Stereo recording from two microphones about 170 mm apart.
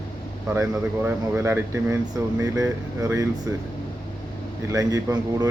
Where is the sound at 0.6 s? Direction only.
15° right (ahead or behind).